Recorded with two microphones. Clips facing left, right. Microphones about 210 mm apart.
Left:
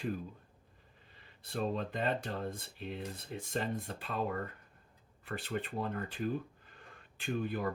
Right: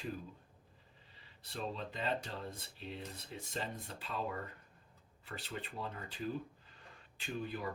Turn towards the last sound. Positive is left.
turn(degrees=55)  # may be behind; listen again after turning